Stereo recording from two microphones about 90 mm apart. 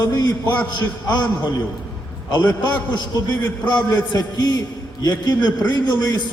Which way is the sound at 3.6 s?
45° left (ahead or behind).